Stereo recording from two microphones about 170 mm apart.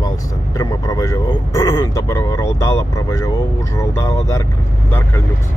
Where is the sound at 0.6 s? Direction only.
20° left (ahead or behind).